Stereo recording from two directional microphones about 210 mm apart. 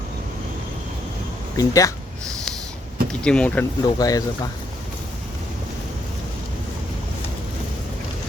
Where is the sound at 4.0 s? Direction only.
15° left (ahead or behind).